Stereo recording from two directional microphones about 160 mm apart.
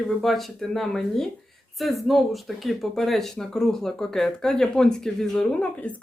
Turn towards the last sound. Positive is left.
turn(degrees=10)  # may be behind; listen again after turning